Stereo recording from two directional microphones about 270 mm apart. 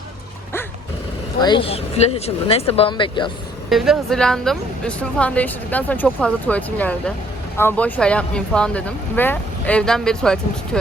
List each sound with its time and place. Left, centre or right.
1.4 s speech: centre
3.7 s speech: centre